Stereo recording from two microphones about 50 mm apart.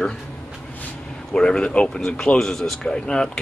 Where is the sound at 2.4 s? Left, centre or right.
Centre.